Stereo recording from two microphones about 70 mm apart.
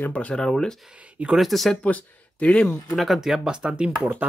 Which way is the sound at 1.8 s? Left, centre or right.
Centre.